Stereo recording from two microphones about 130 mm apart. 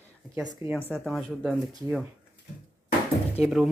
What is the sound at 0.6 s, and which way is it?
Speech, 20° right (ahead or behind).